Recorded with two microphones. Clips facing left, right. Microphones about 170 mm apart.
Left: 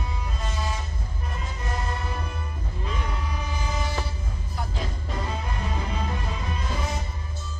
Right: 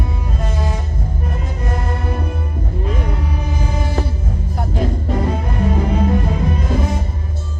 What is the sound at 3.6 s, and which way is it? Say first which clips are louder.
Music: right 8 dB; 50° right (ahead or behind).